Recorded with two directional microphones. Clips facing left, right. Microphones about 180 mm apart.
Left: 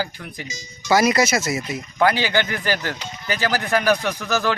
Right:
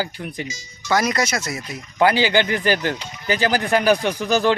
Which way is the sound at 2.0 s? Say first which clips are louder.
Right 2 dB; 25° right (ahead or behind).